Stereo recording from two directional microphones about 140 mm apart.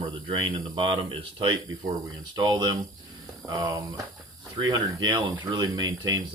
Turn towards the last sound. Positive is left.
turn(degrees=-30)  # may be behind; listen again after turning